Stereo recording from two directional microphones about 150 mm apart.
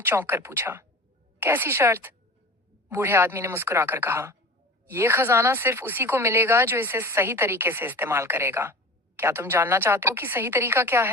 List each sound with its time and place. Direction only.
0.0 s speech: 15° right (ahead or behind)